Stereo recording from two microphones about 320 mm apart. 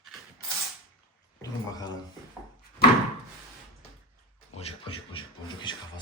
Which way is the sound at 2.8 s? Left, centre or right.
Left.